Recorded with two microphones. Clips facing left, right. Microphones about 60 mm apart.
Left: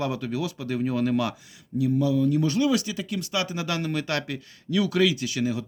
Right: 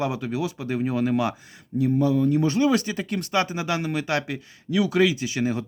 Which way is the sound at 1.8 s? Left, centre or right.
Right.